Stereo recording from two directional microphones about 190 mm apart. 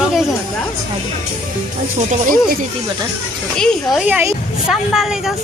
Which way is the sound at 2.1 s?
45° right (ahead or behind).